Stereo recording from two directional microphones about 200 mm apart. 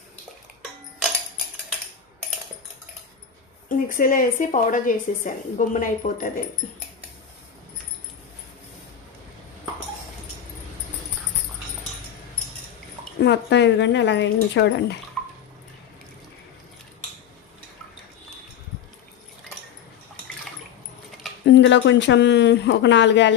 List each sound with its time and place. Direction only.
3.7 s a woman's voice: 45° left (ahead or behind)
13.2 s speech: 60° left (ahead or behind)
15.2 s bathtub: 5° left (ahead or behind)
21.4 s speech: 65° left (ahead or behind)